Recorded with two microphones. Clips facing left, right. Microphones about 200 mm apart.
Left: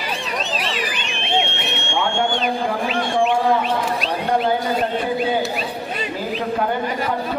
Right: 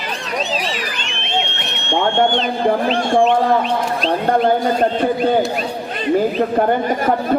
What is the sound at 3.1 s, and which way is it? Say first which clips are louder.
A man's voice: right 4 dB; 50° right (ahead or behind).